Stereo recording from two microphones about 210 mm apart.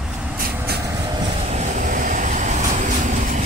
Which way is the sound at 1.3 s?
30° right (ahead or behind).